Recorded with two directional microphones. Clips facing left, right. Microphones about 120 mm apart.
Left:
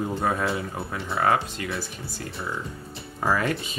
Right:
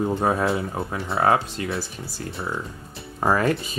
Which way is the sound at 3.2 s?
45° right (ahead or behind).